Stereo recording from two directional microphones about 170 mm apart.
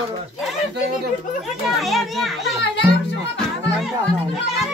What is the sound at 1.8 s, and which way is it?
Speech, centre (ahead or behind).